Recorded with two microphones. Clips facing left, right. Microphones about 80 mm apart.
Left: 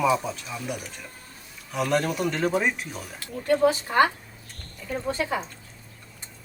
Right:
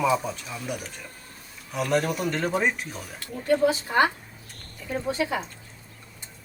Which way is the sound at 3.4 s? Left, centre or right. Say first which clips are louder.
Left 1 dB; left.